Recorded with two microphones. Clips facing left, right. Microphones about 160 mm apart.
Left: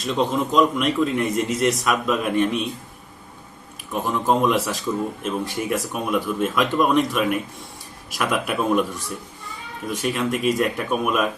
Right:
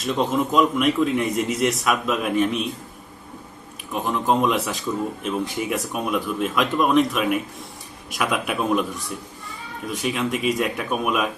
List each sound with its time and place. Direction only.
0.0 s a man's voice: centre (ahead or behind)
3.9 s a man's voice: centre (ahead or behind)